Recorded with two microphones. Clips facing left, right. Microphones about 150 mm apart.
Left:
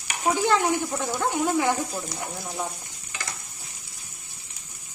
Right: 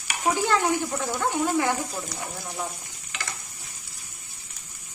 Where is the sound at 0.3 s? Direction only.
15° left (ahead or behind).